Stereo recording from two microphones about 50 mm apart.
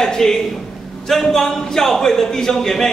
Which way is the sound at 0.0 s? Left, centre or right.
Centre.